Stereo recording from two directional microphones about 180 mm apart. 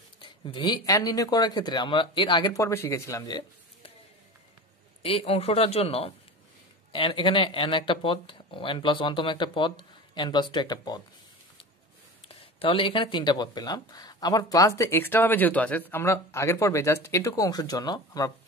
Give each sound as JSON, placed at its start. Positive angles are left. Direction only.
{"t": 0.2, "sound": "speech", "side_deg": 25}
{"t": 5.0, "sound": "speech", "side_deg": 30}
{"t": 12.3, "sound": "speech", "side_deg": 30}